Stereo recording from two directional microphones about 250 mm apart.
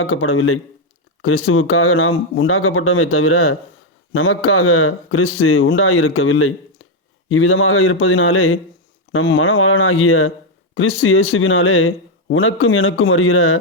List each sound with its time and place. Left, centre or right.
0.0 s a man's voice: left